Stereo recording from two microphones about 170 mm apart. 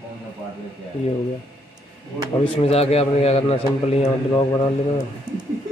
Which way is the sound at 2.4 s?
30° left (ahead or behind).